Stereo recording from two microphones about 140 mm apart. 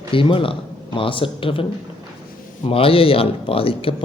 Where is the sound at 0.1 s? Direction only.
40° left (ahead or behind).